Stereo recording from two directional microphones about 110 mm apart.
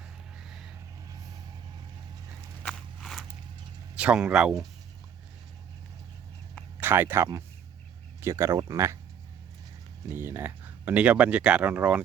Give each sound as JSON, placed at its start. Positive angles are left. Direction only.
{"t": 0.3, "sound": "a sound", "side_deg": -5}
{"t": 3.0, "sound": "walk", "side_deg": 0}
{"t": 3.9, "sound": "speech", "side_deg": -10}
{"t": 6.7, "sound": "speech", "side_deg": -20}
{"t": 10.1, "sound": "speech", "side_deg": -20}